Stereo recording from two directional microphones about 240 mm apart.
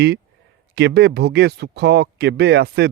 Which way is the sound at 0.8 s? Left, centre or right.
Right.